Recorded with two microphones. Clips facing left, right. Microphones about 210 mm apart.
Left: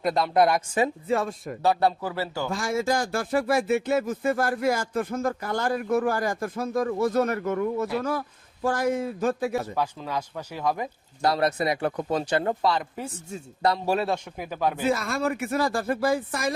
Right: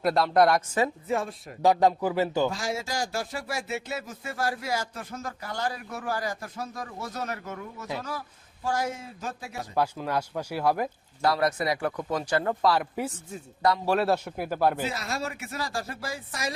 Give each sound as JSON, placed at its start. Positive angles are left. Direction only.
{"t": 0.0, "sound": "a woman's voice", "side_deg": 0}
{"t": 1.2, "sound": "speech", "side_deg": 45}
{"t": 1.6, "sound": "speech", "side_deg": -15}
{"t": 2.5, "sound": "speech", "side_deg": 55}
{"t": 9.7, "sound": "speech", "side_deg": -10}
{"t": 11.3, "sound": "speech", "side_deg": 25}
{"t": 12.6, "sound": "a woman's voice", "side_deg": -5}
{"t": 13.3, "sound": "speech", "side_deg": 25}
{"t": 14.0, "sound": "speech", "side_deg": -5}
{"t": 14.8, "sound": "speech", "side_deg": 50}